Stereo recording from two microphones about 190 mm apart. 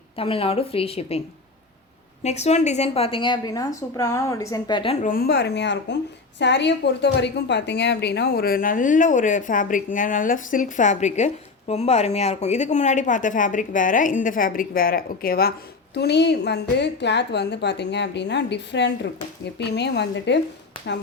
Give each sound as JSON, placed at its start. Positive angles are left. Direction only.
{"t": 0.2, "sound": "speech", "side_deg": 30}
{"t": 2.2, "sound": "a woman's voice", "side_deg": 35}
{"t": 5.0, "sound": "a woman's voice", "side_deg": 50}